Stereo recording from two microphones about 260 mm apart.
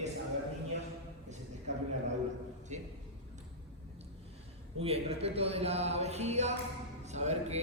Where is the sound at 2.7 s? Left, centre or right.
Right.